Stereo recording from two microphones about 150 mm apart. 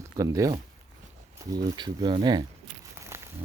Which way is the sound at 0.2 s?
25° right (ahead or behind).